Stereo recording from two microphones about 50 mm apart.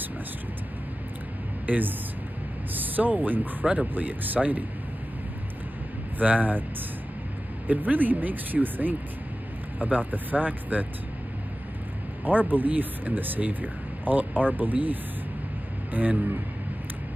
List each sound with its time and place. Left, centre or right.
1.7 s speech: right
2.7 s a sound: right
3.7 s speech: right
6.1 s speech: right
7.6 s speech: right
12.3 s speech: right